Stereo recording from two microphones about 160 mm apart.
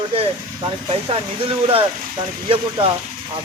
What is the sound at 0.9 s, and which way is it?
Speech, 35° right (ahead or behind).